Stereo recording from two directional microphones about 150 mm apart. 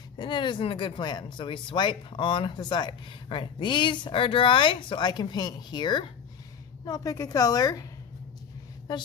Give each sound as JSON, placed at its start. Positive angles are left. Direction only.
{"t": 0.2, "sound": "a woman's voice", "side_deg": 30}